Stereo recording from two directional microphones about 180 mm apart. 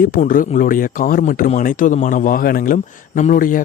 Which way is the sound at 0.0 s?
50° left (ahead or behind).